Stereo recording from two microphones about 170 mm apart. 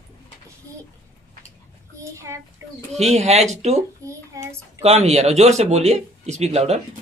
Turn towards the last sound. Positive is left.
turn(degrees=-40)  # may be behind; listen again after turning